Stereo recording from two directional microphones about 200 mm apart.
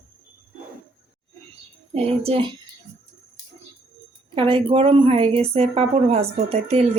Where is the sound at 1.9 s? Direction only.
30° right (ahead or behind).